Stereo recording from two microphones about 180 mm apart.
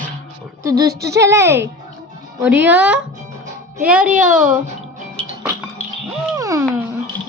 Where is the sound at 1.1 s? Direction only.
15° right (ahead or behind).